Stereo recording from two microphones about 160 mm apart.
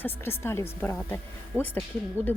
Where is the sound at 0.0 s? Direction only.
15° left (ahead or behind).